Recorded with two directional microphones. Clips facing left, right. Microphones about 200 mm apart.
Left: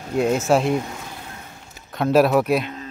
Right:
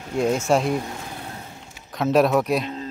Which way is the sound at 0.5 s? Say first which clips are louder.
Left 2 dB; centre (ahead or behind).